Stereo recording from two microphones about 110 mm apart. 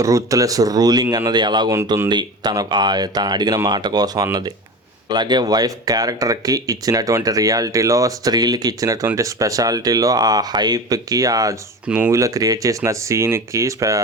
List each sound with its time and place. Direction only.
0.0 s speech: 30° right (ahead or behind)
11.9 s speech: 10° right (ahead or behind)
12.1 s speech: 30° right (ahead or behind)